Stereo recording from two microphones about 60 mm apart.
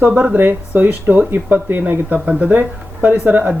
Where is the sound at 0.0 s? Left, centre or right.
Right.